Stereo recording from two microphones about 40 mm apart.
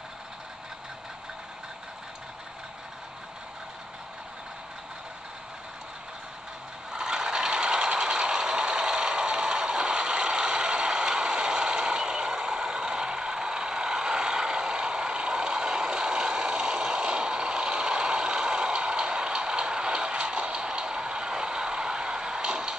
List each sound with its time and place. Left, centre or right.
6.9 s vehicle: centre